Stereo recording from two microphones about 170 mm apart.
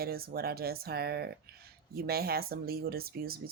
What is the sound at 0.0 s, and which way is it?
Speech, 65° right (ahead or behind).